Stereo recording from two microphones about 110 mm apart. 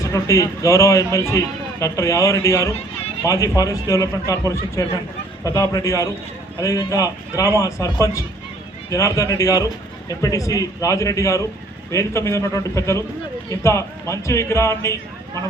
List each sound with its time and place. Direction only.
0.0 s a man's voice: 30° left (ahead or behind)